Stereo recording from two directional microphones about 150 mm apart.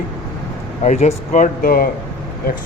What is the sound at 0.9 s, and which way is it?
Speech, 50° left (ahead or behind).